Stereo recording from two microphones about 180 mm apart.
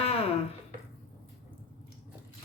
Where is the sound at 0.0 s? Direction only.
35° left (ahead or behind).